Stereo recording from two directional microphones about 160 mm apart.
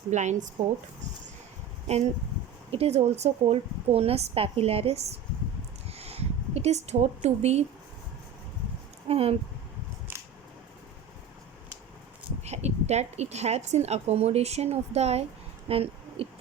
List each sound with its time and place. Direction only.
0.1 s speech: 50° right (ahead or behind)
2.7 s speech: 40° right (ahead or behind)
5.9 s a sound: 40° right (ahead or behind)
9.0 s speech: 40° right (ahead or behind)
12.4 s speech: 45° right (ahead or behind)
15.7 s a sound: 35° right (ahead or behind)